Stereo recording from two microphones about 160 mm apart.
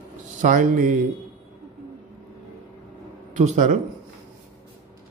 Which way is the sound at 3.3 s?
50° right (ahead or behind).